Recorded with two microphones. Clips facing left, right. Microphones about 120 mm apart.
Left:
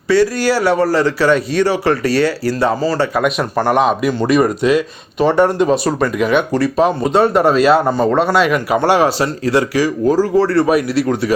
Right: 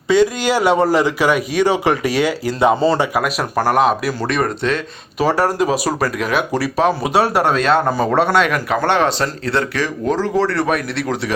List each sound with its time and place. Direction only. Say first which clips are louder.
0.1 s a man's voice: left 1 dB; 20° right (ahead or behind)
3.2 s speech: left 3 dB; centre (ahead or behind)